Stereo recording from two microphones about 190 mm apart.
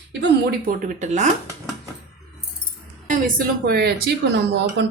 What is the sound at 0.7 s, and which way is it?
Speech, 40° right (ahead or behind).